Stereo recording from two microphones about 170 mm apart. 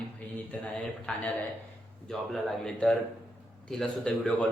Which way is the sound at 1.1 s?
5° left (ahead or behind).